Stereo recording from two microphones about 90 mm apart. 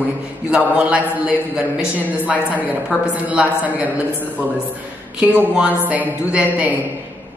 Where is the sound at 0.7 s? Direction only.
15° right (ahead or behind).